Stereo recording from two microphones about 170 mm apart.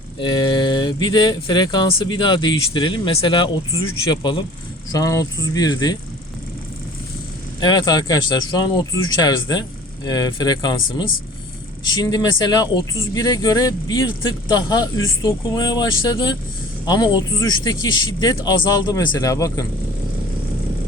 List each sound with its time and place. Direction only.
0.2 s speech: 25° left (ahead or behind)
7.6 s speech: 25° left (ahead or behind)